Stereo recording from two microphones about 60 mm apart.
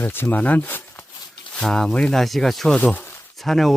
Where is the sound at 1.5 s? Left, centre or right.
Centre.